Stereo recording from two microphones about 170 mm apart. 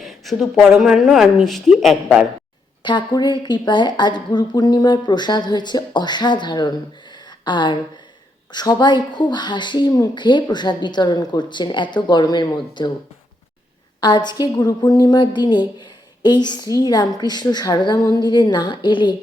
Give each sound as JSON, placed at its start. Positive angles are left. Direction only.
{"t": 0.0, "sound": "speech", "side_deg": 0}
{"t": 2.8, "sound": "speech", "side_deg": 25}
{"t": 14.0, "sound": "speech", "side_deg": 25}